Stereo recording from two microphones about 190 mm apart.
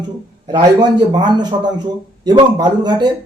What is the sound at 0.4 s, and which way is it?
A man's voice, 25° right (ahead or behind).